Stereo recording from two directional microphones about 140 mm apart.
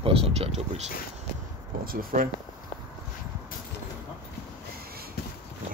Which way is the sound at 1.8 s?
90° right.